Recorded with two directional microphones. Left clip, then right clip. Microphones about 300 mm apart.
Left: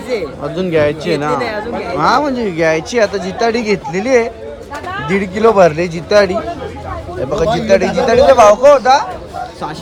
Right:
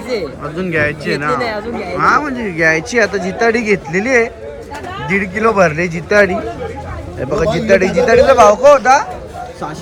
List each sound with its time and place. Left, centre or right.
0.6 s speech: centre
1.3 s speech: centre
8.4 s speech: centre
8.7 s speech: centre